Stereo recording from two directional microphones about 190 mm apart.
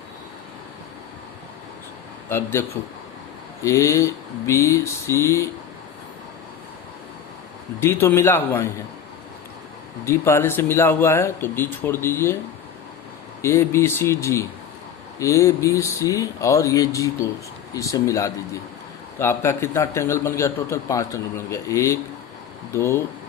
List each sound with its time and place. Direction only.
2.3 s a man's voice: 15° left (ahead or behind)
7.8 s a man's voice: 15° left (ahead or behind)
10.1 s a man's voice: 15° left (ahead or behind)
13.4 s a man's voice: 15° left (ahead or behind)